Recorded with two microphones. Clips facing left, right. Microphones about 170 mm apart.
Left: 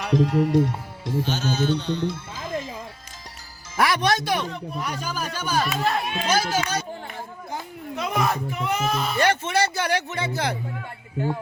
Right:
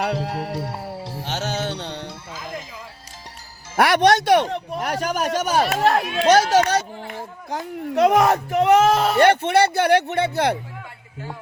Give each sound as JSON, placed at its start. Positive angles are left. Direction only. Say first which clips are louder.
{"t": 0.0, "sound": "speech", "louder": "left 4 dB", "side_deg": -70}
{"t": 0.5, "sound": "speech", "louder": "left 6 dB", "side_deg": -35}
{"t": 1.2, "sound": "speech", "louder": "left 1 dB", "side_deg": -80}
{"t": 3.8, "sound": "speech", "louder": "right 6 dB", "side_deg": -70}